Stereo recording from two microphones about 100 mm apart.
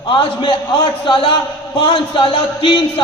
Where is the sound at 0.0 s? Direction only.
55° left (ahead or behind).